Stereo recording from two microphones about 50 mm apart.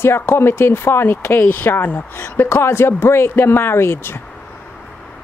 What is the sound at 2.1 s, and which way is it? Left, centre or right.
A woman's voice, left.